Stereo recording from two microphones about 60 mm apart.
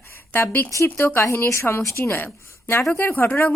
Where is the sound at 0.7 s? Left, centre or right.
Left.